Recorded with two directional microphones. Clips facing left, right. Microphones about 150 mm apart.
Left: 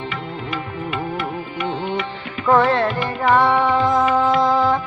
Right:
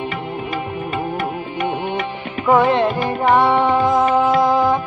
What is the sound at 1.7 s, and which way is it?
Music, 15° right (ahead or behind).